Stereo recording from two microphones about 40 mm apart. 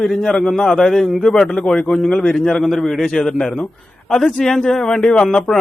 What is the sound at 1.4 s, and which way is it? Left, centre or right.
A man's voice, left.